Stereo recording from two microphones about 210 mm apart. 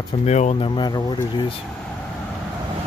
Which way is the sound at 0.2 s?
30° left (ahead or behind).